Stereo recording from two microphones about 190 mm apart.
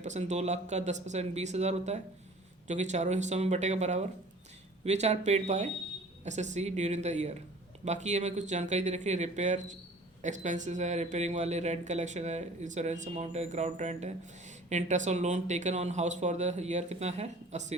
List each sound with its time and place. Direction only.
0.0 s speech: 40° right (ahead or behind)